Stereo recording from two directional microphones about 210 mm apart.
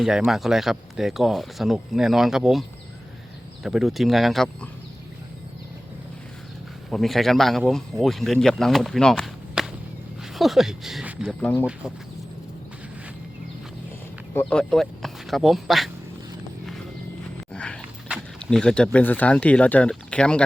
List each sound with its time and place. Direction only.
0.0 s speech: centre (ahead or behind)
6.9 s speech: centre (ahead or behind)
14.3 s speech: 5° left (ahead or behind)
17.5 s speech: 5° left (ahead or behind)